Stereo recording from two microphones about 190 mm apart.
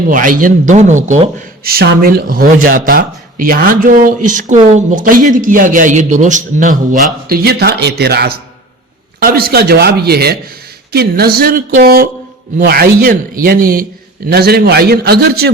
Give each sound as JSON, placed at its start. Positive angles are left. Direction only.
{"t": 0.1, "sound": "speech", "side_deg": -45}
{"t": 7.3, "sound": "a man's voice", "side_deg": -55}